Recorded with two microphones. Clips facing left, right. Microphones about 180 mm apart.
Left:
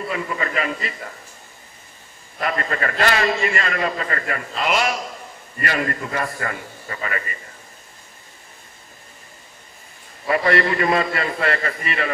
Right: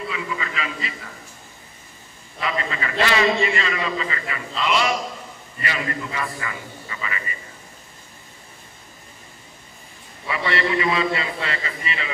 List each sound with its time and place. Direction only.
0.0 s a man's voice: 50° left (ahead or behind)
2.4 s a man's voice: 55° left (ahead or behind)
10.2 s a man's voice: 50° left (ahead or behind)